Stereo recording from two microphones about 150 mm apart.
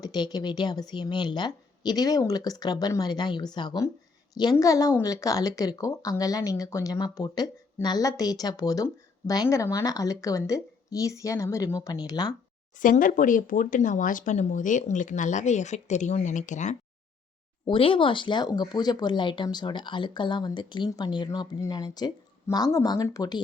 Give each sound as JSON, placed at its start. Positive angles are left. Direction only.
{"t": 0.0, "sound": "a woman's voice", "side_deg": 25}
{"t": 12.7, "sound": "speech", "side_deg": 65}
{"t": 17.7, "sound": "a woman's voice", "side_deg": 35}